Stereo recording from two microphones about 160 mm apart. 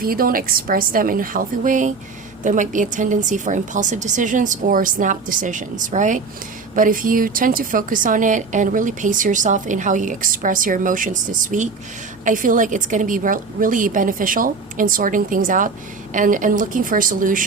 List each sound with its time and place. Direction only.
0.0 s a woman's voice: 65° right (ahead or behind)